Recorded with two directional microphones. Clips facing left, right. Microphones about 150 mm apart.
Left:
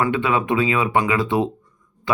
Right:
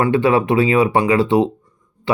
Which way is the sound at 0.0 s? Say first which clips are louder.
Right 5 dB; 30° right (ahead or behind).